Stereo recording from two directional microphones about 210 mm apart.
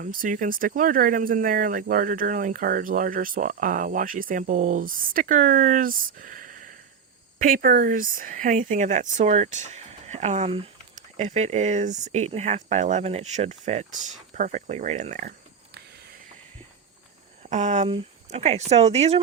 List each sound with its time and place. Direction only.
0.0 s speech: 40° right (ahead or behind)
17.5 s speech: 35° right (ahead or behind)